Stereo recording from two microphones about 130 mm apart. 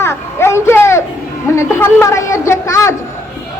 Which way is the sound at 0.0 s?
20° left (ahead or behind).